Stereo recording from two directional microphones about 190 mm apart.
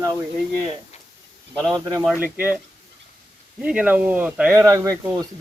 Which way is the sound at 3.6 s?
5° right (ahead or behind).